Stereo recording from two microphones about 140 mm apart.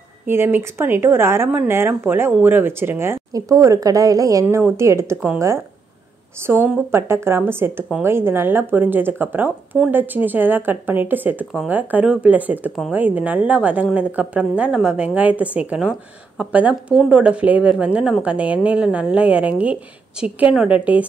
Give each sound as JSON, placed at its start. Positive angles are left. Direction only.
{"t": 0.3, "sound": "a woman's voice", "side_deg": -15}